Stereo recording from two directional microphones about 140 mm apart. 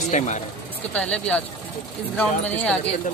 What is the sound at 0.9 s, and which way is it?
Speech, 10° left (ahead or behind).